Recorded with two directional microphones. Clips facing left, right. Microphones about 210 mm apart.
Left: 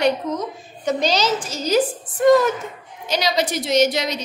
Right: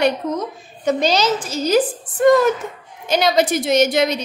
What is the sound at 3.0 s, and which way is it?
A woman's voice, 55° right (ahead or behind).